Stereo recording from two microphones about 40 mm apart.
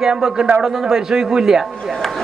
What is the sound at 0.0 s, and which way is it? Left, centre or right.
Speech, centre.